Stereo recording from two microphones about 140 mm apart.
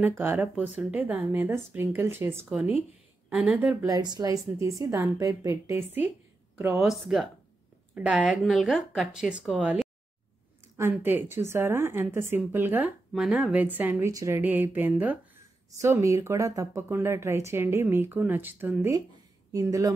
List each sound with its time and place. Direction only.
0.0 s speech: 15° right (ahead or behind)
3.8 s a woman's voice: 30° right (ahead or behind)
6.8 s speech: 5° right (ahead or behind)
10.8 s speech: 15° right (ahead or behind)
13.1 s a woman's voice: 5° right (ahead or behind); by 19.9 s 25° right (ahead or behind)